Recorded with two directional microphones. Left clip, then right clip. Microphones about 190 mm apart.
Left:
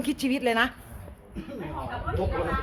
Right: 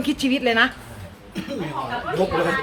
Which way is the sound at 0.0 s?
30° left (ahead or behind).